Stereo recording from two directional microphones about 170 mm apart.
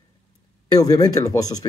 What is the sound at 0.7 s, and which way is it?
Speech, 20° left (ahead or behind).